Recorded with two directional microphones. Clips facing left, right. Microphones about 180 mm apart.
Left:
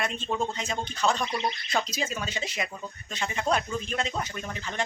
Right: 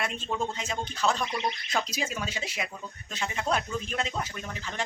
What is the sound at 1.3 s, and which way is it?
Speech, 30° left (ahead or behind).